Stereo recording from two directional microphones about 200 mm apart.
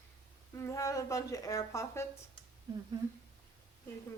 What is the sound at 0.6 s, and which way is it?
Speech, 15° left (ahead or behind).